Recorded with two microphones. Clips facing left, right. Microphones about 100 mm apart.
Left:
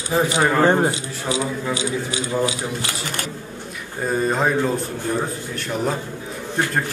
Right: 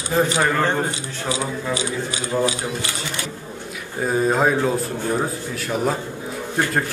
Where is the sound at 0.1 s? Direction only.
10° left (ahead or behind).